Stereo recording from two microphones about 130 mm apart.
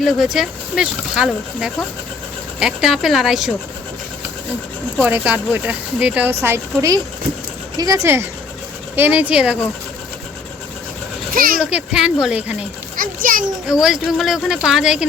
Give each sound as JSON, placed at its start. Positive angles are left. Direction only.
{"t": 0.0, "sound": "speech", "side_deg": -5}
{"t": 4.9, "sound": "speech", "side_deg": -10}
{"t": 6.4, "sound": "speech", "side_deg": -25}
{"t": 11.3, "sound": "a child's voice", "side_deg": -90}
{"t": 11.6, "sound": "speech", "side_deg": -5}
{"t": 13.0, "sound": "children playing", "side_deg": -90}
{"t": 13.8, "sound": "speech", "side_deg": -5}